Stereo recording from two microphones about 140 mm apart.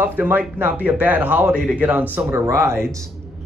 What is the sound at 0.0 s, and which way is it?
A man's voice, 15° right (ahead or behind).